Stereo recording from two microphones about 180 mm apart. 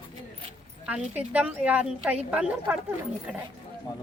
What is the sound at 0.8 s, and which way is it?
A woman's voice, 5° right (ahead or behind).